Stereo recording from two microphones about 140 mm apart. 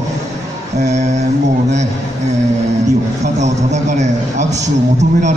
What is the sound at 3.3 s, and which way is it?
A man's voice, 55° right (ahead or behind).